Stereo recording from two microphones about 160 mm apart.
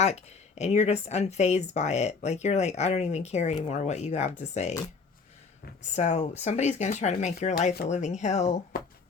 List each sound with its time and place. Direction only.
0.0 s speech: 45° left (ahead or behind)
5.9 s speech: 45° left (ahead or behind)